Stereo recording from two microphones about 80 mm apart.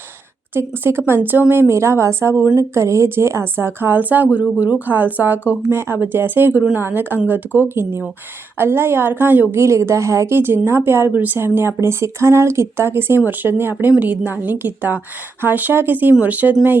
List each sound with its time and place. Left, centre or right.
0.5 s a woman's voice: right